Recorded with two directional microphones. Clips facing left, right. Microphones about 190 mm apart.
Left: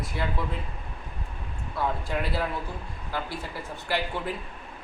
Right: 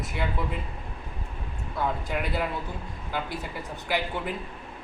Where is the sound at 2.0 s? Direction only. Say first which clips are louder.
Even; 5° right (ahead or behind).